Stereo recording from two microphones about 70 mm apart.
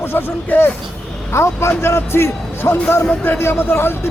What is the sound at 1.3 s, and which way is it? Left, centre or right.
Speech, left.